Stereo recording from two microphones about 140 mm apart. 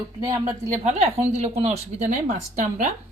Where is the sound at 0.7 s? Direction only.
55° right (ahead or behind).